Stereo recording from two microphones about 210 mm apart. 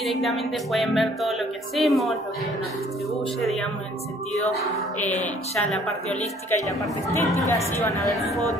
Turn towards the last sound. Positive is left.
turn(degrees=-15)  # may be behind; listen again after turning